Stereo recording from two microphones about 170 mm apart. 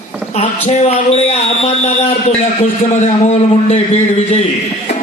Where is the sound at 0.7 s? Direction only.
40° left (ahead or behind).